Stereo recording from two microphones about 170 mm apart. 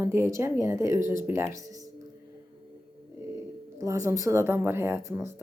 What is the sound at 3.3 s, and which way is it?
Music, 20° right (ahead or behind).